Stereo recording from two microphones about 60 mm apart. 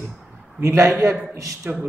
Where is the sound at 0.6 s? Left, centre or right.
Right.